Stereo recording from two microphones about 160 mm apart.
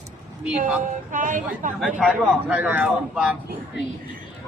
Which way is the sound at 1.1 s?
55° right (ahead or behind).